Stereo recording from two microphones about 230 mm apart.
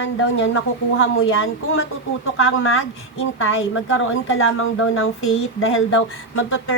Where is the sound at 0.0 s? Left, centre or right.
Left.